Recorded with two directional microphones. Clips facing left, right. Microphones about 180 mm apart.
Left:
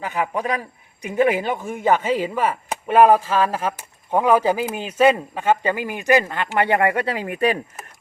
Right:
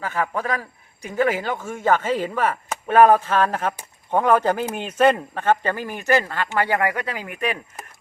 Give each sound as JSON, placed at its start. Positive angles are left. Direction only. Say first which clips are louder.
{"t": 0.0, "sound": "chopping", "louder": "left 1 dB", "side_deg": 15}